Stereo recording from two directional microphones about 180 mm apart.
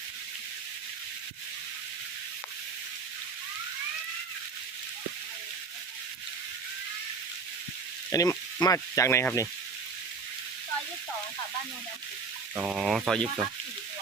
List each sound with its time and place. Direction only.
8.1 s speech: 15° left (ahead or behind)
12.5 s speech: 5° right (ahead or behind)